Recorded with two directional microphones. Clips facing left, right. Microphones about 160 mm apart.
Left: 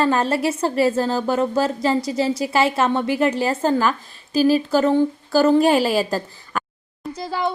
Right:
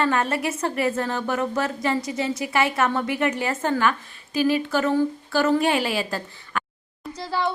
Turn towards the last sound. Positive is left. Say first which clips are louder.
# left 2 dB
turn(degrees=15)  # may be behind; listen again after turning